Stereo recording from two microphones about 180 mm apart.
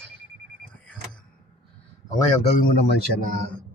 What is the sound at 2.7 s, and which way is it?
Speech, 70° left (ahead or behind).